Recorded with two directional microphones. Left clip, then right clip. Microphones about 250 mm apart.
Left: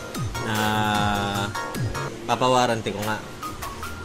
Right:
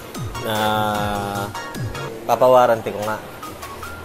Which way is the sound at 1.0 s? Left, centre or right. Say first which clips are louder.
Right 1 dB; left.